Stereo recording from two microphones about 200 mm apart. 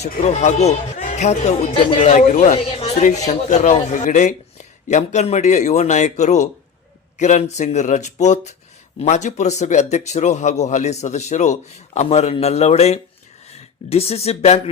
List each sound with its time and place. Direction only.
0.0 s speech: 35° left (ahead or behind)